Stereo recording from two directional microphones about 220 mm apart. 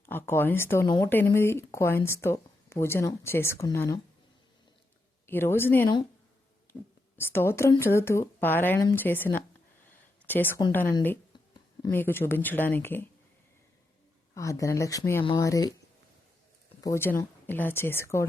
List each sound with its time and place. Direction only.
0.0 s speech: 10° left (ahead or behind)
5.2 s speech: 10° left (ahead or behind)
7.2 s speech: 10° left (ahead or behind)
14.3 s speech: 15° left (ahead or behind)
16.8 s speech: 10° left (ahead or behind)